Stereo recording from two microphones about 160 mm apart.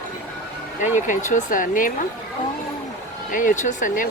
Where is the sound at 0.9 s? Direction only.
55° left (ahead or behind).